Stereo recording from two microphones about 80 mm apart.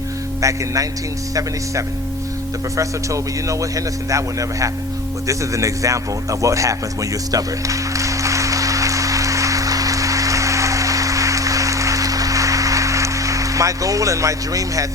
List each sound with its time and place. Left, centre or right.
0.4 s speech: right
2.7 s speech: right
6.4 s music: right